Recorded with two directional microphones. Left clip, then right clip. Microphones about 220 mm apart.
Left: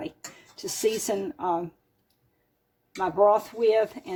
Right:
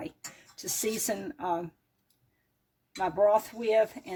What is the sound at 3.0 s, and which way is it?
Speech, 35° right (ahead or behind).